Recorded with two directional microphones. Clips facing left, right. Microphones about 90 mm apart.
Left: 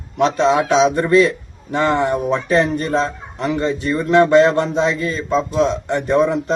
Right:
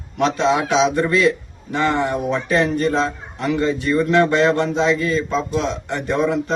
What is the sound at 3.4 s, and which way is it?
A man's voice, 30° left (ahead or behind).